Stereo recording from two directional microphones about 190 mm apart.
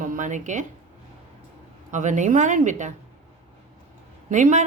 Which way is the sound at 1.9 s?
40° right (ahead or behind).